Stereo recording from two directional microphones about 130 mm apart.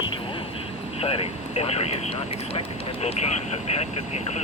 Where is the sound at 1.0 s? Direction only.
50° left (ahead or behind).